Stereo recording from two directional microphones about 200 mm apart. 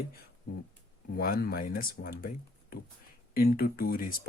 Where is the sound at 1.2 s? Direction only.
45° left (ahead or behind).